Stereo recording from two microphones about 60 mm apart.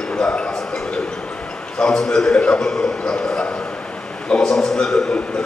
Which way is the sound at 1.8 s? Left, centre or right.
Centre.